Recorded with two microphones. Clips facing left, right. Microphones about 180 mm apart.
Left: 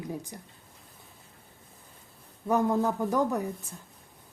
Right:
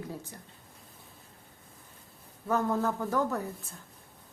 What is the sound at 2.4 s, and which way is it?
Speech, 15° left (ahead or behind).